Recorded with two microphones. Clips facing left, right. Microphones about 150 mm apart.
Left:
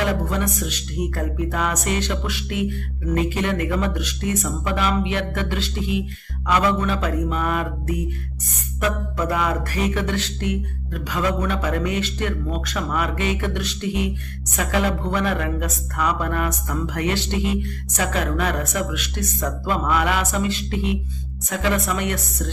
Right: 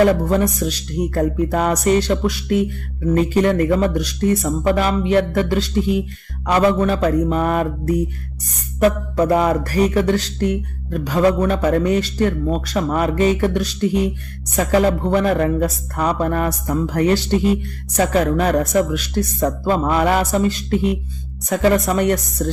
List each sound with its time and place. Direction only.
0.0 s speech: 40° right (ahead or behind)